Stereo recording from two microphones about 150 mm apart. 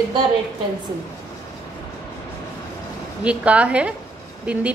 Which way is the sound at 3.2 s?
10° right (ahead or behind).